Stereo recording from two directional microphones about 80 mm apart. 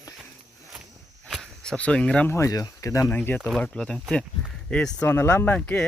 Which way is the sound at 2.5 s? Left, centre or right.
Left.